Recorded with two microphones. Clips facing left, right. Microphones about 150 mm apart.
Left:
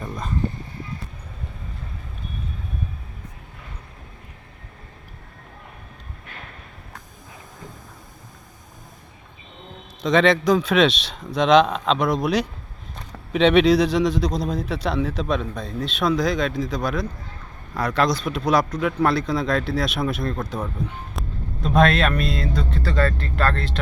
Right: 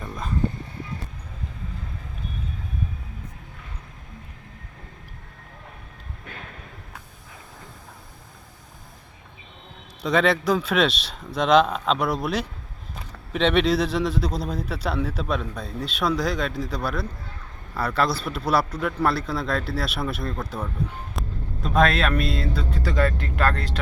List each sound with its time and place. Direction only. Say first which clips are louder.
0.0 s a sound: left 2 dB; centre (ahead or behind)
10.0 s a man's voice: left 3 dB; 5° right (ahead or behind)
21.1 s vehicle: left 1 dB; centre (ahead or behind)
21.8 s a man's voice: left 2 dB; centre (ahead or behind)